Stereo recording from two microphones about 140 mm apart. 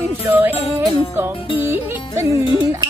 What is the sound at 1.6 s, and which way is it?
Music, 20° right (ahead or behind).